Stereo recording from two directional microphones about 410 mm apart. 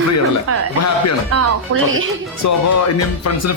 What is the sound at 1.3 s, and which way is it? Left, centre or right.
Speech, right.